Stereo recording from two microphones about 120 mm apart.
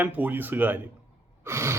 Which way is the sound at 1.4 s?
20° right (ahead or behind).